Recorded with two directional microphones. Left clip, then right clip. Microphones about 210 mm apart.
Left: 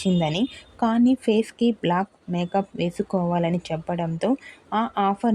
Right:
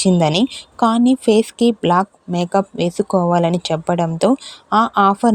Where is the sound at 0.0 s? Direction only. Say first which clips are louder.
Right 9 dB; 30° right (ahead or behind).